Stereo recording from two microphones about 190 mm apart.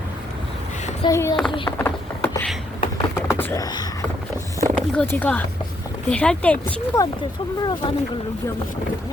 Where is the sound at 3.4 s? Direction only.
15° left (ahead or behind).